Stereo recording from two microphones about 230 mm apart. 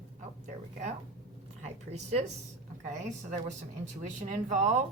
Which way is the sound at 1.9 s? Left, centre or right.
Right.